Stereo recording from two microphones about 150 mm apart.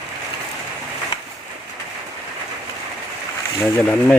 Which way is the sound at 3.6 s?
10° left (ahead or behind).